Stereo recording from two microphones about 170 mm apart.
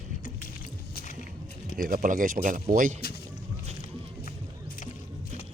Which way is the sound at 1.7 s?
55° right (ahead or behind).